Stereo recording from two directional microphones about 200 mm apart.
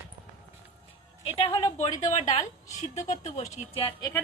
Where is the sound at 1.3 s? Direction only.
30° left (ahead or behind).